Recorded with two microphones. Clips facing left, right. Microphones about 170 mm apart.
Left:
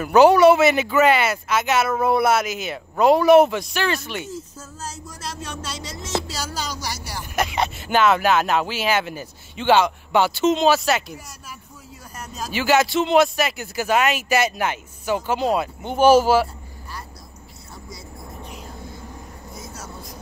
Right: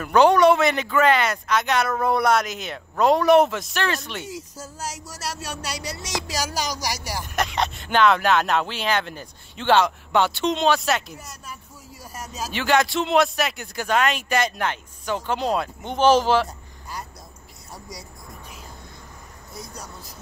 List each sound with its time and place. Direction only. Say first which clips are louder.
0.0 s speech: left 3 dB; 5° left (ahead or behind)
4.8 s speech: right 1 dB; 85° right; by 5.9 s 70° right (ahead or behind)
5.9 s music: left 4 dB; 15° right (ahead or behind)
7.3 s speech: left 2 dB; centre (ahead or behind)
19.5 s vehicle: even; 5° left (ahead or behind)